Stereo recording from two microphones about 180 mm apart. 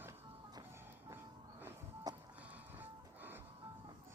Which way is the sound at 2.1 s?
20° right (ahead or behind).